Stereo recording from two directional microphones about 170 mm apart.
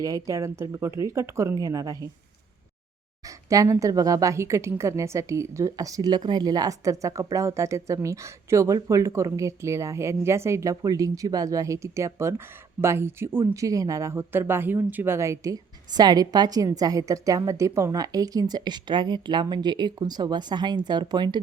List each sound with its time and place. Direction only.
0.3 s a woman's voice: 20° right (ahead or behind)
3.2 s a woman's voice: 20° right (ahead or behind)